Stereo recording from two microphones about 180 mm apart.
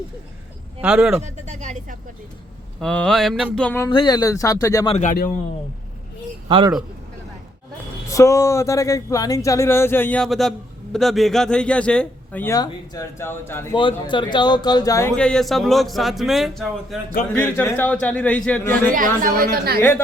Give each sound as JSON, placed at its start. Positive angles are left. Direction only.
{"t": 0.8, "sound": "a man's voice", "side_deg": -5}
{"t": 1.2, "sound": "speech", "side_deg": -40}
{"t": 2.8, "sound": "a man's voice", "side_deg": 5}
{"t": 3.8, "sound": "speech", "side_deg": 25}
{"t": 4.9, "sound": "a man's voice", "side_deg": 40}
{"t": 6.5, "sound": "a man's voice", "side_deg": -25}
{"t": 8.0, "sound": "a man's voice", "side_deg": 15}
{"t": 13.7, "sound": "speech", "side_deg": 25}
{"t": 15.1, "sound": "a man's voice", "side_deg": 5}
{"t": 18.9, "sound": "a woman's voice", "side_deg": -50}